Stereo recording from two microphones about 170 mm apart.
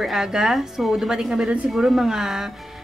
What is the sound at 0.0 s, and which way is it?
A woman's voice, 5° right (ahead or behind).